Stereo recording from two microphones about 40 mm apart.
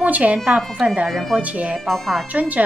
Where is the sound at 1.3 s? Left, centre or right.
Right.